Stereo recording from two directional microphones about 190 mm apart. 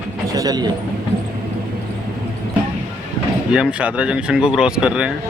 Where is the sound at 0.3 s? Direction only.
20° right (ahead or behind).